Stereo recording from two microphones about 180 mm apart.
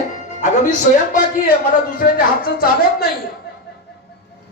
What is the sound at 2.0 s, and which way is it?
Speech, 55° left (ahead or behind).